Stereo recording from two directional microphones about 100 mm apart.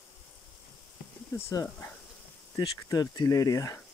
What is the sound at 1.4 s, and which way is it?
Speech, 30° left (ahead or behind).